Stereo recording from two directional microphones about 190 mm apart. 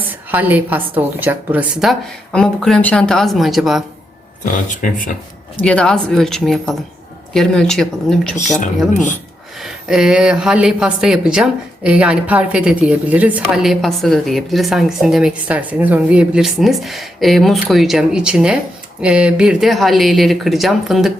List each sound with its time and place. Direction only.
0.1 s a woman's voice: 10° right (ahead or behind)
4.5 s speech: 45° left (ahead or behind)
5.5 s a woman's voice: 5° left (ahead or behind)
8.9 s speech: 40° left (ahead or behind)
9.6 s a woman's voice: centre (ahead or behind)